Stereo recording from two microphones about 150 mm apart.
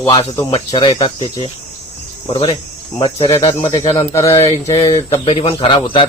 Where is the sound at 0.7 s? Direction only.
30° left (ahead or behind).